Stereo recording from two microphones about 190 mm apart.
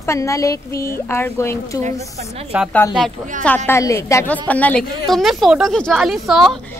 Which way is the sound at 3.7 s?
15° left (ahead or behind).